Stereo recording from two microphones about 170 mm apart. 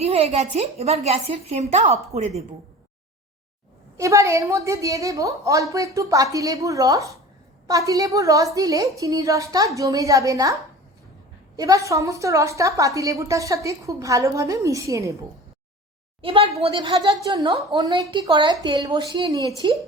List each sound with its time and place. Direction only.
0.0 s a sound: 40° right (ahead or behind)
0.5 s speech: 40° right (ahead or behind)
3.9 s a woman's voice: 20° right (ahead or behind)
16.2 s a woman's voice: 30° right (ahead or behind)